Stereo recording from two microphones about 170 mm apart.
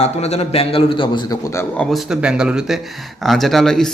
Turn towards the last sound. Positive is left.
turn(degrees=5)  # may be behind; listen again after turning